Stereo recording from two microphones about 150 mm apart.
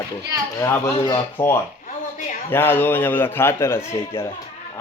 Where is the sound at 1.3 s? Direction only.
15° left (ahead or behind).